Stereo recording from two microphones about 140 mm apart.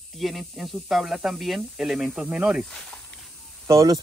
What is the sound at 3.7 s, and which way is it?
Speech, 25° right (ahead or behind).